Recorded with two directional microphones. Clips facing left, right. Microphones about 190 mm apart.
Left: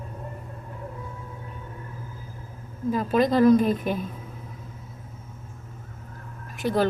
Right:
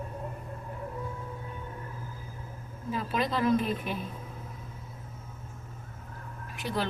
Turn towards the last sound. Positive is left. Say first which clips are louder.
# left 9 dB
turn(degrees=45)  # may be behind; listen again after turning